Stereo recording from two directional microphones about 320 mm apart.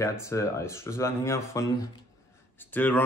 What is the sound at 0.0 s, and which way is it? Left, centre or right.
Speech, centre.